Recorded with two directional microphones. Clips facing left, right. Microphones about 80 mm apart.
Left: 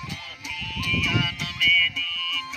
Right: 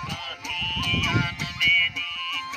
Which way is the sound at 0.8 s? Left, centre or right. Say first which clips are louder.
Left 1 dB; right.